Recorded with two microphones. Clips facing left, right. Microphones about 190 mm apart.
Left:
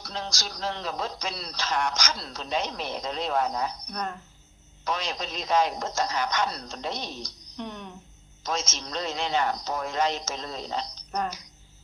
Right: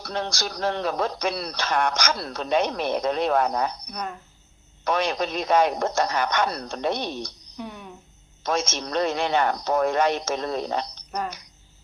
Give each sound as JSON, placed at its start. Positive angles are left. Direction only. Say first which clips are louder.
{"t": 0.0, "sound": "speech", "louder": "right 6 dB", "side_deg": -60}
{"t": 3.8, "sound": "speech", "louder": "even", "side_deg": -10}
{"t": 4.8, "sound": "speech", "louder": "right 7 dB", "side_deg": -60}
{"t": 7.5, "sound": "a sound", "louder": "left 2 dB", "side_deg": -5}
{"t": 8.4, "sound": "speech", "louder": "right 6 dB", "side_deg": -60}